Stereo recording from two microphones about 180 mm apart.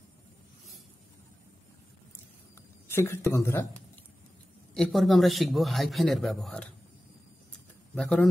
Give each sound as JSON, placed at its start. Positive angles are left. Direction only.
{"t": 2.9, "sound": "a man's voice", "side_deg": 15}
{"t": 4.7, "sound": "a man's voice", "side_deg": 0}
{"t": 7.9, "sound": "a man's voice", "side_deg": 5}